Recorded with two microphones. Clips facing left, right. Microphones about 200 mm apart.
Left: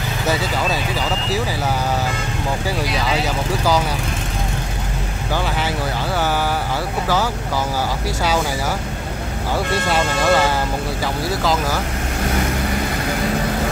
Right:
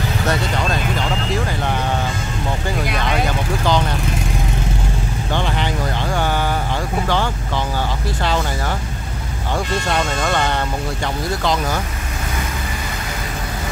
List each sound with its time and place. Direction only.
3.6 s speech: 5° left (ahead or behind)
9.8 s speech: 5° left (ahead or behind)